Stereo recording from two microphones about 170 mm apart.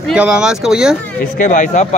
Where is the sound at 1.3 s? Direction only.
50° left (ahead or behind).